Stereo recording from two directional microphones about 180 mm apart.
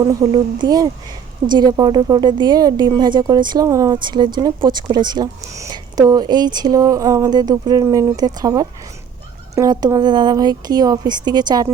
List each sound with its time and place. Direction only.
0.0 s speech: 20° right (ahead or behind)